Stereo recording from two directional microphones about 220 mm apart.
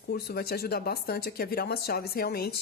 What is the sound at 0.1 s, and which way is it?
Speech, 45° left (ahead or behind).